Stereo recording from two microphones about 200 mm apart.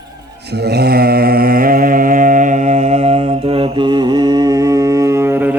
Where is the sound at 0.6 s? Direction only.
55° right (ahead or behind).